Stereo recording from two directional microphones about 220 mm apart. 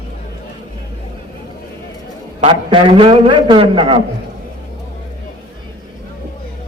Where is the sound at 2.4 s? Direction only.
25° right (ahead or behind).